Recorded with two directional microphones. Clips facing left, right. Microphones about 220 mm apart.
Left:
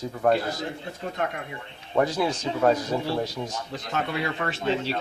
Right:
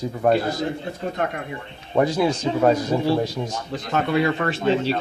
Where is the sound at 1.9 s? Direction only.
15° right (ahead or behind).